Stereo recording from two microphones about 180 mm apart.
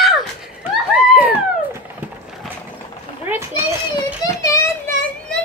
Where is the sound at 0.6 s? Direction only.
10° right (ahead or behind).